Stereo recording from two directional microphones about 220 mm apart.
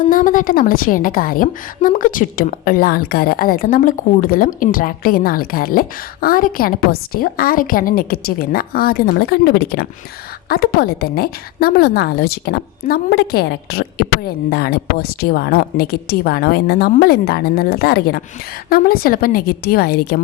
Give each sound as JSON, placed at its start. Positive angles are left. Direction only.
{"t": 0.1, "sound": "a woman's voice", "side_deg": 40}